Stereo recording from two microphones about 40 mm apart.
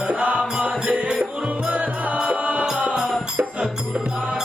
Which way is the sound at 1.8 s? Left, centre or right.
Right.